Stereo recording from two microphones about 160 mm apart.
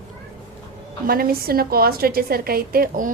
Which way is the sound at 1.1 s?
70° right (ahead or behind).